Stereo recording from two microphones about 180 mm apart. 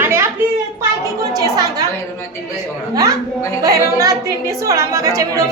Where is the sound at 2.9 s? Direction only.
20° right (ahead or behind).